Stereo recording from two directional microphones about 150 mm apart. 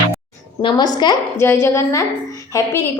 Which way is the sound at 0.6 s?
30° left (ahead or behind).